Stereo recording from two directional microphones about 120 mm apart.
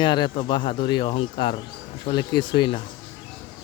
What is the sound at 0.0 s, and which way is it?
Speech, 40° left (ahead or behind).